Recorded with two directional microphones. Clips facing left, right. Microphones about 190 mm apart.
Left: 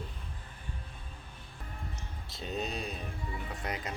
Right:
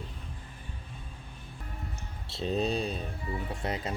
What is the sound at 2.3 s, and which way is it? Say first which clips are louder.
Speech: right 7 dB; 30° right (ahead or behind).